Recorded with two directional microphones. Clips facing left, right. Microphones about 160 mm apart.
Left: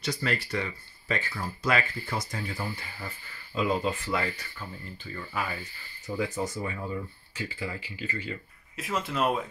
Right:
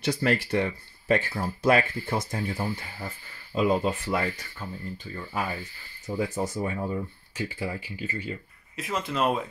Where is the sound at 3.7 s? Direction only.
45° right (ahead or behind).